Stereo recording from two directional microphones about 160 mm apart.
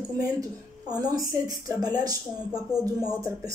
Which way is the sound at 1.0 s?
25° right (ahead or behind).